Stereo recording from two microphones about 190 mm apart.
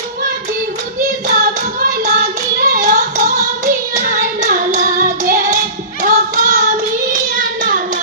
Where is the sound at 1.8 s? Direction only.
45° right (ahead or behind).